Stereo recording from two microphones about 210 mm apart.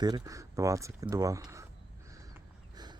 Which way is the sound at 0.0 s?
15° right (ahead or behind).